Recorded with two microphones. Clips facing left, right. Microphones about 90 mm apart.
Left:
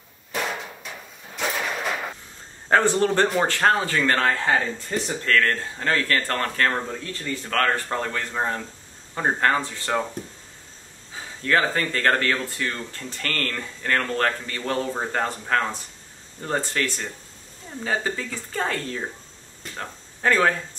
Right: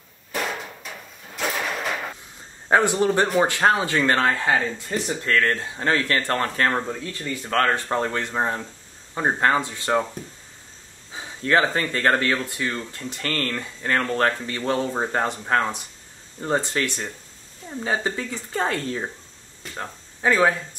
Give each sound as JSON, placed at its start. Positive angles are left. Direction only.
{"t": 0.3, "sound": "a sound", "side_deg": 0}
{"t": 2.7, "sound": "speech", "side_deg": -15}
{"t": 11.1, "sound": "speech", "side_deg": -20}
{"t": 19.6, "sound": "speech", "side_deg": -10}